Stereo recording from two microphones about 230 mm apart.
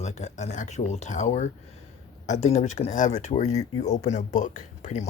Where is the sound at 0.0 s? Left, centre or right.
Left.